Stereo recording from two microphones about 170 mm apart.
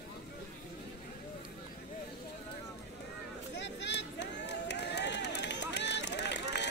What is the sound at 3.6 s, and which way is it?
Run, 90° left.